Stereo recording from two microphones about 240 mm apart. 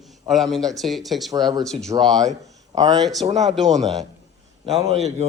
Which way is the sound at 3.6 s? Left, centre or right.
Right.